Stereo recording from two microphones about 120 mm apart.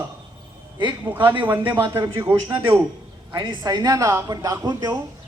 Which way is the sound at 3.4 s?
35° right (ahead or behind).